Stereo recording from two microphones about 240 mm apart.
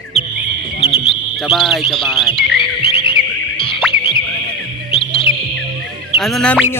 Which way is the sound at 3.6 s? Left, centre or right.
Left.